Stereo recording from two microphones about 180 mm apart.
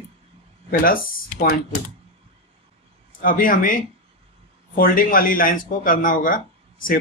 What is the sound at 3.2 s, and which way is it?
Speech, 50° left (ahead or behind).